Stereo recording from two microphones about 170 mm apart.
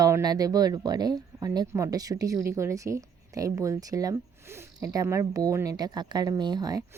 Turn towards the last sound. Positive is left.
turn(degrees=-25)  # may be behind; listen again after turning